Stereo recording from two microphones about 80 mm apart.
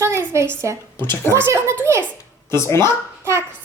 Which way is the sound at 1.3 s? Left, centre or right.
Right.